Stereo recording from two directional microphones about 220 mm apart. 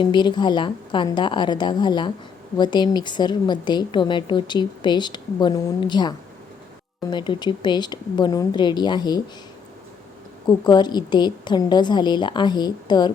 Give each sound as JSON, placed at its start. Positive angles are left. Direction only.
{"t": 0.0, "sound": "a woman's voice", "side_deg": 20}
{"t": 10.4, "sound": "a woman's voice", "side_deg": 20}